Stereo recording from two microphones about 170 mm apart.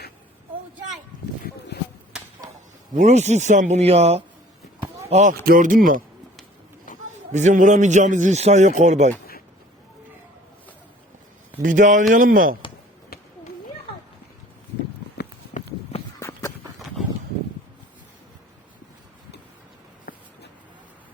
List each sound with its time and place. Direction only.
2.1 s a sound: 5° right (ahead or behind)
2.9 s speech: 45° right (ahead or behind)
5.3 s a man's voice: 55° right (ahead or behind)
7.3 s a man's voice: 45° right (ahead or behind)
11.6 s a man's voice: 50° right (ahead or behind)
16.2 s run: 15° left (ahead or behind)
20.1 s writing: 55° left (ahead or behind)